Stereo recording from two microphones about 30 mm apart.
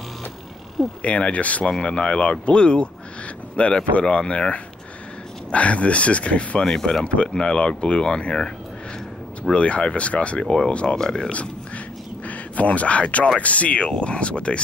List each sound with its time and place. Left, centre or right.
1.0 s speech: left
1.7 s speech: left
5.5 s speech: left
6.6 s speech: centre
7.3 s speech: left
9.4 s speech: left
10.4 s speech: centre
10.7 s speech: left
11.0 s speech: left
12.3 s speech: left